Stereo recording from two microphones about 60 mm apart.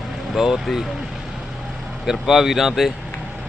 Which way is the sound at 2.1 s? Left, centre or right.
Centre.